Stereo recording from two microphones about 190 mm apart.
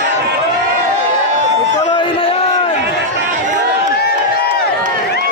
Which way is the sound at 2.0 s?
30° left (ahead or behind).